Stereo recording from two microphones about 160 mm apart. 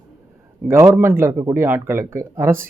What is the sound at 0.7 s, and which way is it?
A man's voice, 15° right (ahead or behind).